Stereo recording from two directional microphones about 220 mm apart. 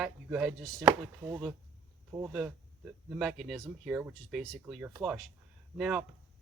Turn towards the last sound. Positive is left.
turn(degrees=0)  # may be behind; listen again after turning